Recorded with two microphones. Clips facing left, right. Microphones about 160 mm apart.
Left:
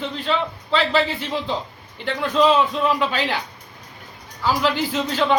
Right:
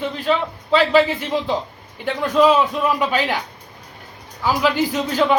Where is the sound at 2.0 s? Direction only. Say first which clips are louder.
Right 2 dB; 10° right (ahead or behind).